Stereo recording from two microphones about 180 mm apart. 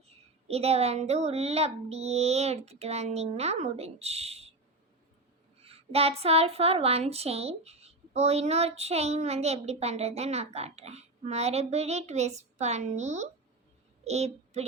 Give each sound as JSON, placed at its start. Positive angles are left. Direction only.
{"t": 0.4, "sound": "speech", "side_deg": -35}
{"t": 5.6, "sound": "a woman's voice", "side_deg": -35}